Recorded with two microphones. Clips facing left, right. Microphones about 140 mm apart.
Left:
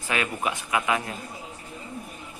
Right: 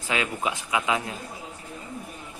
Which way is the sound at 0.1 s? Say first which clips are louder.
Even; 20° right (ahead or behind).